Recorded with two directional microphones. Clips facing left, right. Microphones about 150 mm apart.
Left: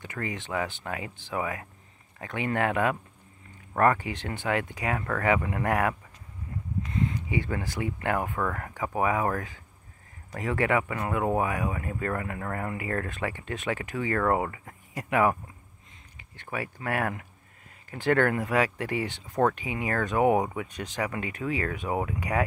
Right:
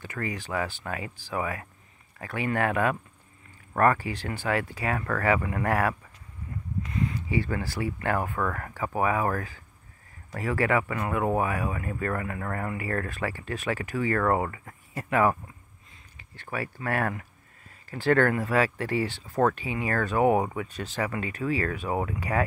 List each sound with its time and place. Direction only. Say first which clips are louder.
0.0 s speech: right 1 dB; 20° left (ahead or behind)